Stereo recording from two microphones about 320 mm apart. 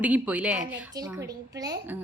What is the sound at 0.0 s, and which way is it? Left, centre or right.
A woman's voice, centre.